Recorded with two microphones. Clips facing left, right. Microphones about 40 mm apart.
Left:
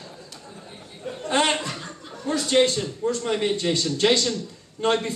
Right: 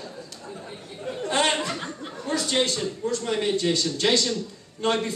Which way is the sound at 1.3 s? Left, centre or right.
Centre.